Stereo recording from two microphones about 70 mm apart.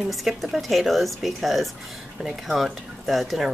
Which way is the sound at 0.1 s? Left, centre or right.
Centre.